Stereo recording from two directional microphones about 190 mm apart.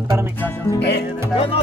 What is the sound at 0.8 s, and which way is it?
Speech, 65° left (ahead or behind).